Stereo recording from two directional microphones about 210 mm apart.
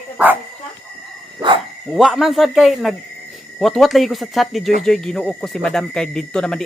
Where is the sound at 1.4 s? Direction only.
15° right (ahead or behind).